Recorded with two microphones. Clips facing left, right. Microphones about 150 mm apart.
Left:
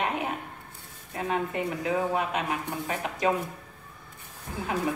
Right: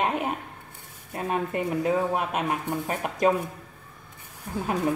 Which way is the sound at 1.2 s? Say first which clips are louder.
Right 2 dB; 50° right (ahead or behind).